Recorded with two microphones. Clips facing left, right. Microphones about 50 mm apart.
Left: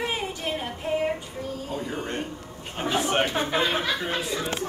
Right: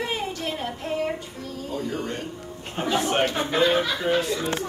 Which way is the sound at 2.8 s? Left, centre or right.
Centre.